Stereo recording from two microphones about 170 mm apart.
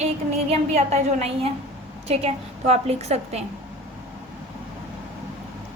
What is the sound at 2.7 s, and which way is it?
Speech, 40° right (ahead or behind).